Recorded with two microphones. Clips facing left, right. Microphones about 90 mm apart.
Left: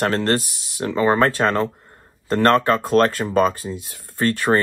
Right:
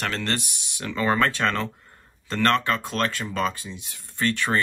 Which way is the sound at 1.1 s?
40° left (ahead or behind).